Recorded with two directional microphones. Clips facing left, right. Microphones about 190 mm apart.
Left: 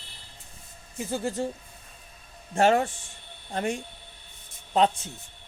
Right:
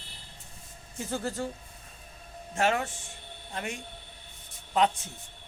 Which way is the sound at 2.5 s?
35° left (ahead or behind).